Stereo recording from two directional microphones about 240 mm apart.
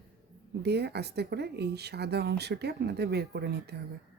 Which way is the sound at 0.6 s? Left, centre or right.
Right.